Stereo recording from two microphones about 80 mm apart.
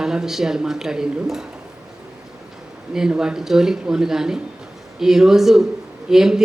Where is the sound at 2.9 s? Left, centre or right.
Centre.